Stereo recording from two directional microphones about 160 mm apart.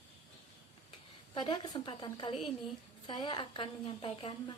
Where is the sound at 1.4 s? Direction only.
30° left (ahead or behind).